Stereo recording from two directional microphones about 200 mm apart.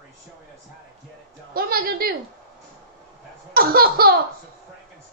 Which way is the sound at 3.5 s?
50° right (ahead or behind).